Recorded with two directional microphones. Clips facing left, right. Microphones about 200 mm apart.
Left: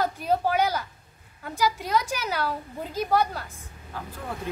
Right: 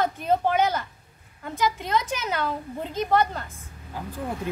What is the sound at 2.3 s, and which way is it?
A woman's voice, 5° left (ahead or behind).